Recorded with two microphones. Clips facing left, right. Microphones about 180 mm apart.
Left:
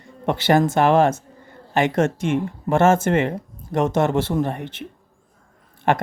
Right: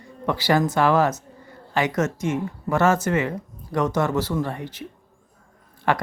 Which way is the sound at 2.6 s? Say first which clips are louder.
Left 3 dB; 25° left (ahead or behind).